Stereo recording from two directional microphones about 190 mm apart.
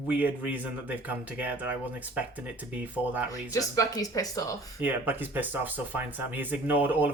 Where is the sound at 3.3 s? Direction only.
20° left (ahead or behind).